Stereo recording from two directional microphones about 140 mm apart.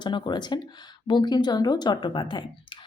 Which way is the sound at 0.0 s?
35° left (ahead or behind).